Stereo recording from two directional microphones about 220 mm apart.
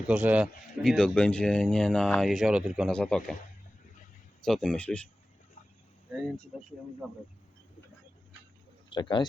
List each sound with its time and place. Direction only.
0.1 s speech: 5° right (ahead or behind)
4.4 s speech: centre (ahead or behind)
8.9 s a man's voice: 20° left (ahead or behind)